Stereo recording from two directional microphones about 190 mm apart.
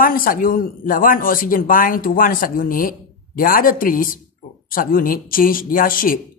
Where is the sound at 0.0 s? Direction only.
50° left (ahead or behind).